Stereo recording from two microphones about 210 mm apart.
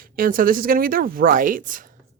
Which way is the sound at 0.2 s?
40° right (ahead or behind).